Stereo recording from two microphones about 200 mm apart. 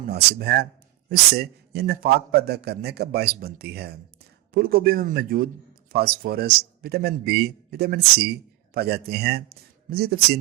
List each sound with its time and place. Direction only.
0.0 s speech: 50° right (ahead or behind)